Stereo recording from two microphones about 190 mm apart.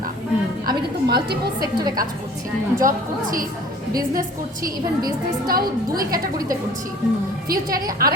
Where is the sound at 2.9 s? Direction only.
45° right (ahead or behind).